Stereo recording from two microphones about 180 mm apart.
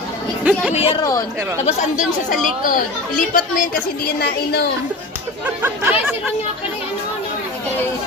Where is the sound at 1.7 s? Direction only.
40° left (ahead or behind); by 4.6 s 60° left (ahead or behind).